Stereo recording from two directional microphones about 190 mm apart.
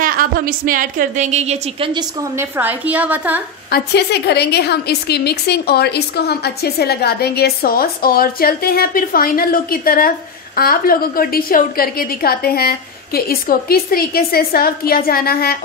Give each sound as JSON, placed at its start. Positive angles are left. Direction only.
{"t": 0.0, "sound": "a woman's voice", "side_deg": -50}
{"t": 2.0, "sound": "a woman's voice", "side_deg": -15}
{"t": 3.7, "sound": "a woman's voice", "side_deg": 60}